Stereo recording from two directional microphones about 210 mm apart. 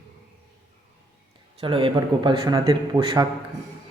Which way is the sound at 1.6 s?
25° right (ahead or behind).